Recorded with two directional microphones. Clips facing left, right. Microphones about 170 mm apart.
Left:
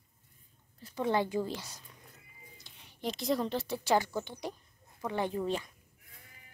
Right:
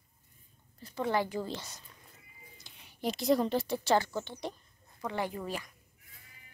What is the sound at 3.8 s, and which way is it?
Speech, 10° left (ahead or behind).